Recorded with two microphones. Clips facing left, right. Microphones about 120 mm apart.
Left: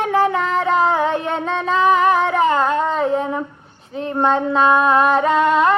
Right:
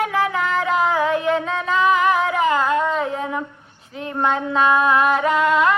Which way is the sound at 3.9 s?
30° left (ahead or behind).